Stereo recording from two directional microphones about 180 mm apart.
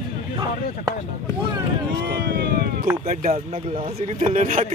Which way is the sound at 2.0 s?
60° right (ahead or behind).